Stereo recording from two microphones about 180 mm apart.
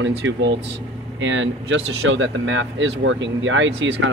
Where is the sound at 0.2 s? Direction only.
90° right.